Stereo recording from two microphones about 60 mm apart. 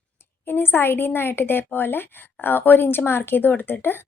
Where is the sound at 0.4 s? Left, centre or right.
Left.